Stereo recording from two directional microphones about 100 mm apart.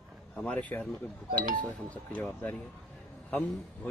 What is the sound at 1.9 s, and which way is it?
Speech, 10° left (ahead or behind).